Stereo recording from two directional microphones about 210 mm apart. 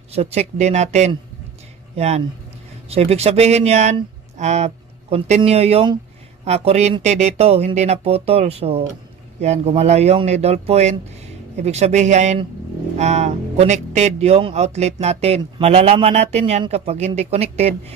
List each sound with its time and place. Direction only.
0.1 s speech: 30° right (ahead or behind)